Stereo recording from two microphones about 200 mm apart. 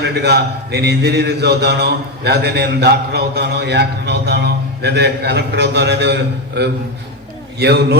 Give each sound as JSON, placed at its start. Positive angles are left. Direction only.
{"t": 0.0, "sound": "a man's voice", "side_deg": -55}
{"t": 7.6, "sound": "a man's voice", "side_deg": -55}